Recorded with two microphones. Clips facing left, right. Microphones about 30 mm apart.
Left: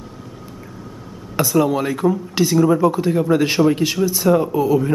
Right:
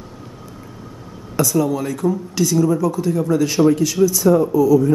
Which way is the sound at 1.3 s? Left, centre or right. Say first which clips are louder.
Left 1 dB; left.